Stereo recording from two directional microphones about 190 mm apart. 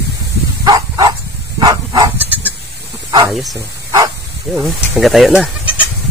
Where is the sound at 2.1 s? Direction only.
10° right (ahead or behind).